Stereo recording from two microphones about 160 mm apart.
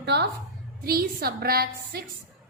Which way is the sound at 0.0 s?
90° right.